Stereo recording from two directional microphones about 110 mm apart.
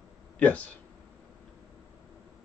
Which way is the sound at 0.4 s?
15° left (ahead or behind).